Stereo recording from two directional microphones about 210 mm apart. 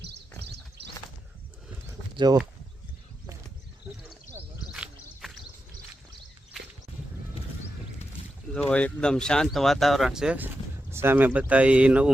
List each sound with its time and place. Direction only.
2.1 s speech: 20° right (ahead or behind)
4.1 s a sound: 5° right (ahead or behind)
8.5 s speech: 5° left (ahead or behind)